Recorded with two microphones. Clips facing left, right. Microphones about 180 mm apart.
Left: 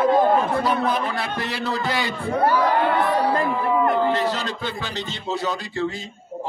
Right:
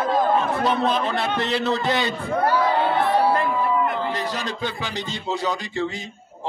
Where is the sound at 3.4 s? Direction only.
45° left (ahead or behind).